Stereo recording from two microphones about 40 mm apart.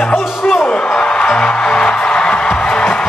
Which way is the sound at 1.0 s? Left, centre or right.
Left.